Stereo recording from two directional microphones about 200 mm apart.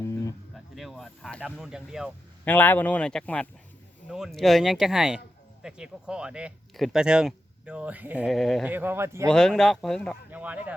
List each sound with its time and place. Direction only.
0.0 s insect: 15° left (ahead or behind)
0.5 s speech: centre (ahead or behind)
2.4 s speech: 10° left (ahead or behind)
8.7 s a man's voice: 10° right (ahead or behind)
9.3 s speech: 5° left (ahead or behind)